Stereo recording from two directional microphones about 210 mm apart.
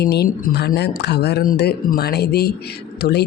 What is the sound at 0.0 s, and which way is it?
Speech, 50° left (ahead or behind).